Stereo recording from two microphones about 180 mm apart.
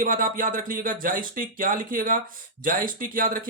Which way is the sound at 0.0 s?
50° right (ahead or behind).